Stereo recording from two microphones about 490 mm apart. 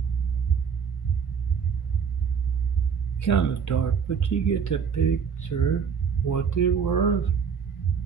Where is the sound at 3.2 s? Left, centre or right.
Left.